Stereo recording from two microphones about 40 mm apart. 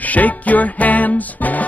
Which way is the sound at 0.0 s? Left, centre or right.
Left.